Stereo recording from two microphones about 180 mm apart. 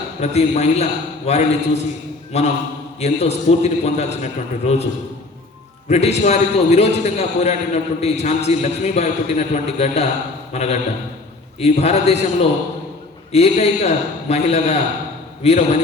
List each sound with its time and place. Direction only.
0.2 s a man's voice: 35° left (ahead or behind)
5.9 s a man's voice: 35° left (ahead or behind)